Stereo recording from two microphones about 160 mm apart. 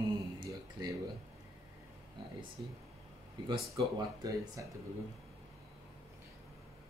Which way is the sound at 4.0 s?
20° right (ahead or behind).